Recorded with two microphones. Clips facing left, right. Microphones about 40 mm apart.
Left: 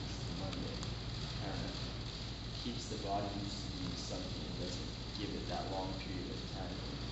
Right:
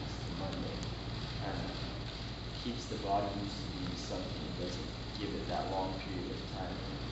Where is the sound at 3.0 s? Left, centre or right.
Centre.